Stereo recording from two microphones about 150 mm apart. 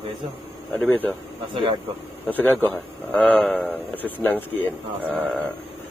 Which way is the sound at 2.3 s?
10° left (ahead or behind).